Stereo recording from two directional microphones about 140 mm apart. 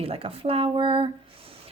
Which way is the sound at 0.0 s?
40° right (ahead or behind).